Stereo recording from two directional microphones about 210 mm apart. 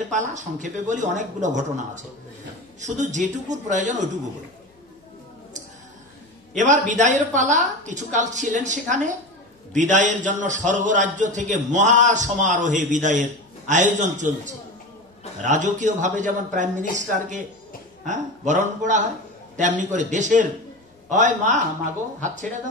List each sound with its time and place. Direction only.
0.1 s a man's voice: 35° right (ahead or behind)
6.5 s a man's voice: 35° right (ahead or behind)